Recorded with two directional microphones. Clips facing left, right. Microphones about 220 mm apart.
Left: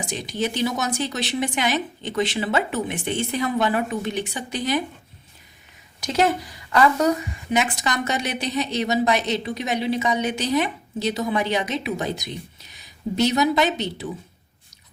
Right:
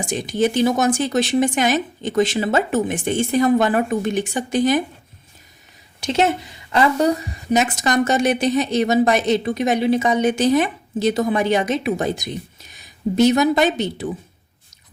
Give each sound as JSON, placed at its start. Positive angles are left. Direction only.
{"t": 0.0, "sound": "a woman's voice", "side_deg": -50}
{"t": 6.0, "sound": "a woman's voice", "side_deg": -25}